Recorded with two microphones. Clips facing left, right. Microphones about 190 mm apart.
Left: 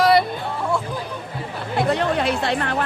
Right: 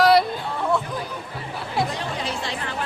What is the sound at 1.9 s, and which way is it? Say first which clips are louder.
Speech: left 9 dB; 65° left (ahead or behind).